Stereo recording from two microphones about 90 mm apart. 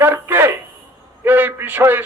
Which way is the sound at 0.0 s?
20° right (ahead or behind).